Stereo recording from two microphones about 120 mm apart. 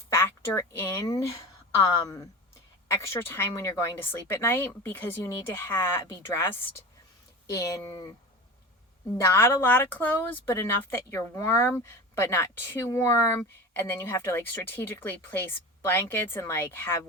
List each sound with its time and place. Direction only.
0.1 s speech: 20° left (ahead or behind)
9.2 s speech: 20° left (ahead or behind)